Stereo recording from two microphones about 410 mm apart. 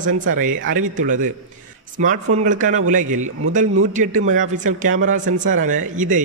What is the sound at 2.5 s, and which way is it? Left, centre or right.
A man's voice, centre.